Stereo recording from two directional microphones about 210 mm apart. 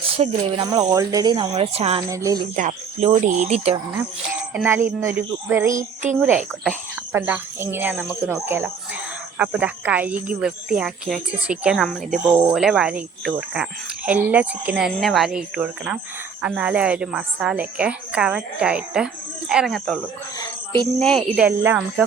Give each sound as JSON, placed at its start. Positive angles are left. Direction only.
{"t": 0.0, "sound": "speech", "side_deg": -25}
{"t": 2.0, "sound": "speech", "side_deg": -15}
{"t": 2.6, "sound": "speech", "side_deg": -35}
{"t": 4.5, "sound": "speech", "side_deg": -10}
{"t": 5.7, "sound": "speech", "side_deg": -35}
{"t": 6.1, "sound": "a woman's voice", "side_deg": -5}
{"t": 21.0, "sound": "a woman's voice", "side_deg": 0}